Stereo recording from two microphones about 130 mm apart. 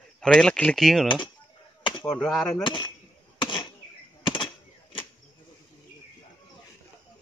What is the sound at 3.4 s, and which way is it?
Chop, 40° left (ahead or behind).